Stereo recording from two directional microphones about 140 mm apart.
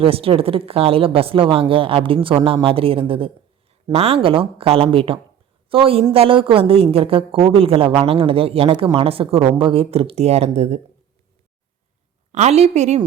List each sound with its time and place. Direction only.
0.0 s speech: 40° right (ahead or behind)
12.3 s speech: 55° right (ahead or behind)